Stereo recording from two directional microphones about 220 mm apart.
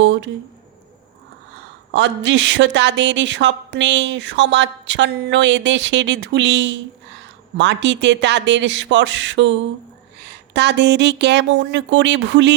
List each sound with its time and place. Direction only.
0.0 s speech: 55° right (ahead or behind)
1.9 s a woman's voice: 55° right (ahead or behind)